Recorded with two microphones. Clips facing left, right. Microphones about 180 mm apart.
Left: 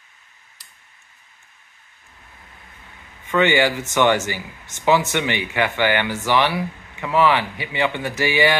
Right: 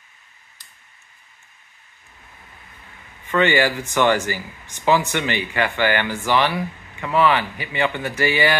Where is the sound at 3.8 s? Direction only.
20° left (ahead or behind).